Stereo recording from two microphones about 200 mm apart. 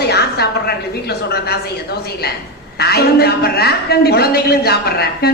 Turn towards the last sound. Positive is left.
turn(degrees=50)  # may be behind; listen again after turning